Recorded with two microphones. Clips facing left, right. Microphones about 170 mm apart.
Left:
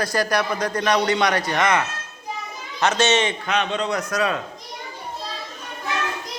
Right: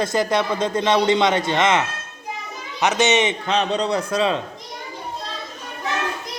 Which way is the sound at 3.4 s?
35° right (ahead or behind).